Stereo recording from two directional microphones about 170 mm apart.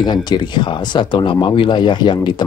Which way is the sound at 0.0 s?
25° left (ahead or behind).